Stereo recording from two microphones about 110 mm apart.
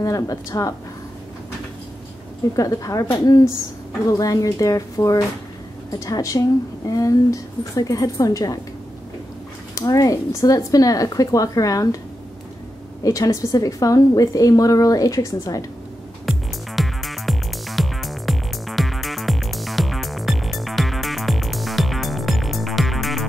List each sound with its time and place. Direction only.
0.0 s a woman's voice: 30° left (ahead or behind)
2.5 s a woman's voice: 30° left (ahead or behind)
9.8 s a woman's voice: 30° left (ahead or behind)
13.0 s a woman's voice: 30° left (ahead or behind)
16.3 s music: centre (ahead or behind)